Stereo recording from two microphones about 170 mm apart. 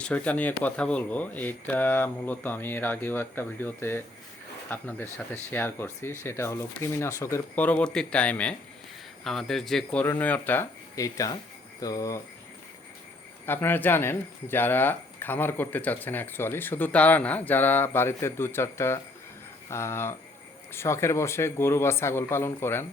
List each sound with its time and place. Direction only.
0.0 s speech: 10° left (ahead or behind)
13.4 s speech: 10° left (ahead or behind)